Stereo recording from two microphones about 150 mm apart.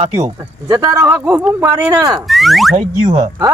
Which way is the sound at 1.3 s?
10° right (ahead or behind).